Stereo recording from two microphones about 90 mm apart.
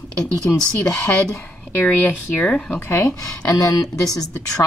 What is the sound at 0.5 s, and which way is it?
Speech, 35° left (ahead or behind).